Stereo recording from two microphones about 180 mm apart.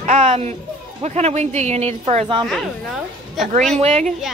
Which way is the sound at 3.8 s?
35° right (ahead or behind).